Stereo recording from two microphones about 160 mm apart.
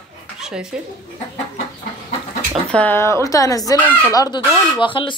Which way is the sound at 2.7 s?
10° left (ahead or behind).